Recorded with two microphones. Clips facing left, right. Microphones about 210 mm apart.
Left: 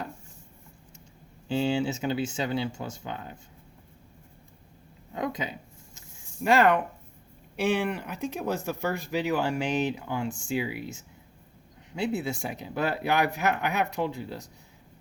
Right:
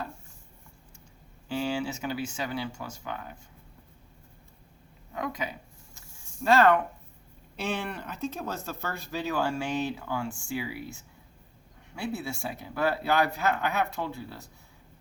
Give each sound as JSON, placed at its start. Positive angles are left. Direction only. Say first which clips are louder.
{"t": 1.5, "sound": "speech", "louder": "left 4 dB", "side_deg": 25}
{"t": 5.1, "sound": "a sound", "louder": "left 2 dB", "side_deg": 20}
{"t": 6.4, "sound": "speech", "louder": "even", "side_deg": 15}